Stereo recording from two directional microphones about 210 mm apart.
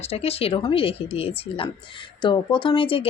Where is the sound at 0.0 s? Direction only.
30° left (ahead or behind).